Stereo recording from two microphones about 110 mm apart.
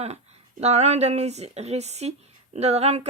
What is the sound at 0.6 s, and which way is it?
Speech, 90° right.